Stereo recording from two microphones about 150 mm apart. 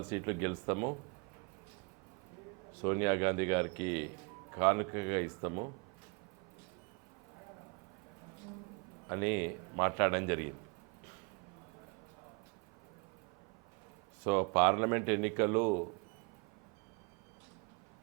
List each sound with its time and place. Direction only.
0.0 s a man's voice: 20° right (ahead or behind)
2.8 s a man's voice: 20° right (ahead or behind)
9.0 s a man's voice: 20° right (ahead or behind)
14.3 s a man's voice: 20° right (ahead or behind)